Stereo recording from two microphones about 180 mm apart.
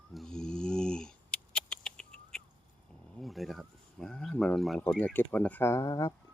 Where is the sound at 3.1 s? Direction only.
Centre (ahead or behind).